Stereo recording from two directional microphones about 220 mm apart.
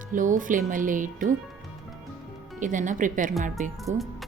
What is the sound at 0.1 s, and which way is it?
Speech, 35° right (ahead or behind).